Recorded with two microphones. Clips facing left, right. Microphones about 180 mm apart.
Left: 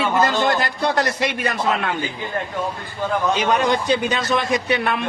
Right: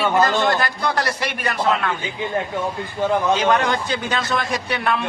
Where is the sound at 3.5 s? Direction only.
15° left (ahead or behind).